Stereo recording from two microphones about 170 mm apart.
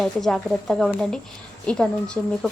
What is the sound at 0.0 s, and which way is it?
Speech, centre (ahead or behind).